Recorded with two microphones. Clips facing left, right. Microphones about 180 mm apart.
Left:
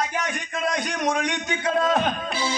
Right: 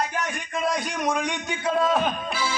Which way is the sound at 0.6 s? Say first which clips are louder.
Even; 5° right (ahead or behind).